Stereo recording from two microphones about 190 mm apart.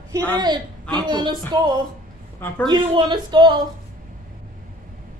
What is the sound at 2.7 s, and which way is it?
Speech, 25° right (ahead or behind).